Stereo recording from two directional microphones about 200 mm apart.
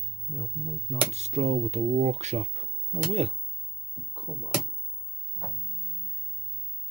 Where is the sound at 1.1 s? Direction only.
35° right (ahead or behind).